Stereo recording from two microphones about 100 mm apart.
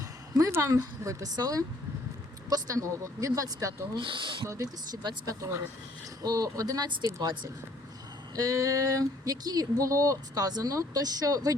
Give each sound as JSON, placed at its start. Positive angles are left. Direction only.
{"t": 0.3, "sound": "speech", "side_deg": -35}
{"t": 3.9, "sound": "speech", "side_deg": -55}
{"t": 4.4, "sound": "speech", "side_deg": -30}
{"t": 8.4, "sound": "speech", "side_deg": -35}